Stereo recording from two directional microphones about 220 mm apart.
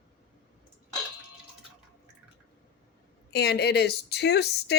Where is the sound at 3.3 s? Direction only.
50° left (ahead or behind).